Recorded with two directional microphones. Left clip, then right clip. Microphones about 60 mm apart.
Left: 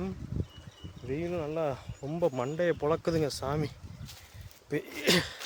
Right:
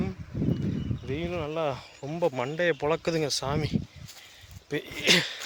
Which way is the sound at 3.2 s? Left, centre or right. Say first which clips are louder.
Right 3 dB; left.